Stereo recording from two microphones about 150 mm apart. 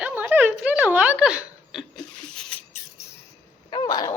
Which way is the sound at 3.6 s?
30° left (ahead or behind).